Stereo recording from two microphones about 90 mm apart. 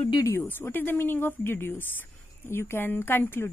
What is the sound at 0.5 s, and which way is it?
A woman's voice, 20° left (ahead or behind).